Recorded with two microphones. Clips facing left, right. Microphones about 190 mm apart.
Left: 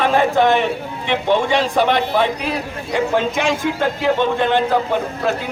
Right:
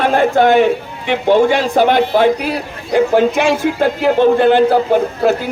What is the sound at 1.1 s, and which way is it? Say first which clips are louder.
Speech: right 6 dB; 40° right (ahead or behind).